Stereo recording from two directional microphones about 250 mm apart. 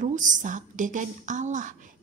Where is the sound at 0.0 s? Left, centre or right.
Right.